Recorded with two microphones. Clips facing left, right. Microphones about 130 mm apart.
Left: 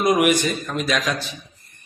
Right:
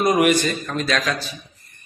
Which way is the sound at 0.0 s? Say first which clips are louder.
Right 1 dB; 10° left (ahead or behind).